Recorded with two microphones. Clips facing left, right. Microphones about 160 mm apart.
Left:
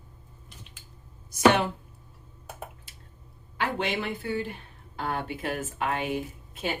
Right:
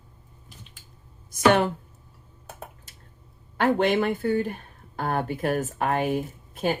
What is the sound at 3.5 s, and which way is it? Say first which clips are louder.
Speech: right 8 dB; 45° right (ahead or behind).